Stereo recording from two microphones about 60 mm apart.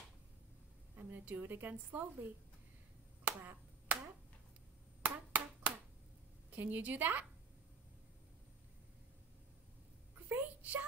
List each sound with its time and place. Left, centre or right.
0.9 s a woman's voice: right
3.3 s finger snapping: right
5.0 s clapping: right
6.5 s a woman's voice: right
10.2 s a sound: right